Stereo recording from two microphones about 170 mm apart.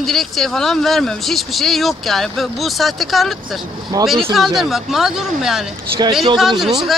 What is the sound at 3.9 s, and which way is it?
Speech, 20° right (ahead or behind).